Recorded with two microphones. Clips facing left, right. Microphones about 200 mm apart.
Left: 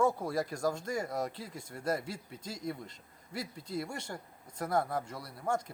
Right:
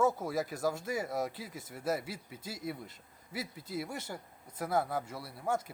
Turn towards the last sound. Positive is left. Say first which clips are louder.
# even
turn(degrees=-5)  # may be behind; listen again after turning